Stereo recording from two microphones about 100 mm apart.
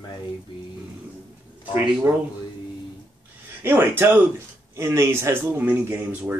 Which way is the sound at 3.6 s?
25° right (ahead or behind).